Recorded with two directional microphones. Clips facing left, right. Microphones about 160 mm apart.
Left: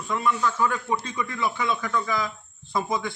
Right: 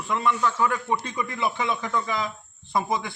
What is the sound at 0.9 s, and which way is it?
Speech, 20° right (ahead or behind).